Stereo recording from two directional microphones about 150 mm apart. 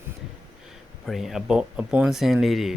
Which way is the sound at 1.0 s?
Centre (ahead or behind).